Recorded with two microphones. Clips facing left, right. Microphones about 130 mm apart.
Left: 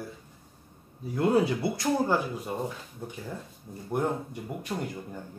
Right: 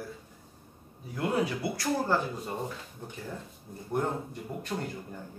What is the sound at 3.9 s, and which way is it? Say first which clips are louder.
Speech: left 2 dB; 10° left (ahead or behind).